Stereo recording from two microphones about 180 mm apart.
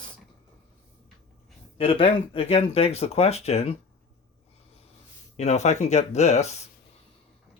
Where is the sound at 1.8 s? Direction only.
30° left (ahead or behind).